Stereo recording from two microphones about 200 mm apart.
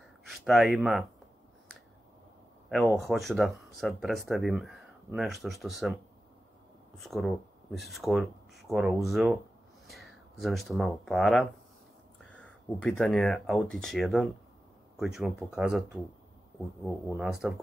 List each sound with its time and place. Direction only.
0.3 s speech: centre (ahead or behind)
2.7 s speech: centre (ahead or behind)
7.0 s speech: centre (ahead or behind)